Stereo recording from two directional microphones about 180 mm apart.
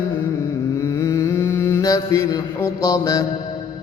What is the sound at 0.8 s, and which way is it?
Mantra, 15° left (ahead or behind).